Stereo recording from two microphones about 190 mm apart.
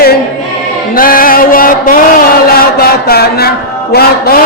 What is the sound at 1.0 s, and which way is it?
Music, 50° left (ahead or behind).